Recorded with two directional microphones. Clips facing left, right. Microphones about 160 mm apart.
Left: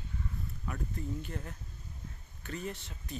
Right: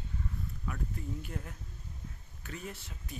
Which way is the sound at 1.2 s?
10° right (ahead or behind).